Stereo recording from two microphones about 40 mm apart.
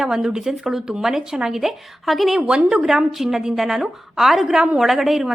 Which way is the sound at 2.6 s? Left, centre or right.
Right.